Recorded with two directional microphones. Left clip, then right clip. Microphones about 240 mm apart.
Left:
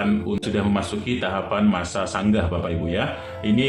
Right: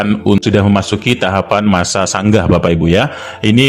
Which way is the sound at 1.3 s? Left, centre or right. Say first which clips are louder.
Right 10 dB; right.